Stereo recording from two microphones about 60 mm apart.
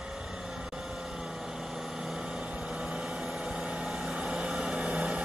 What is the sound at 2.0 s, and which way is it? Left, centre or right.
Vehicle, centre.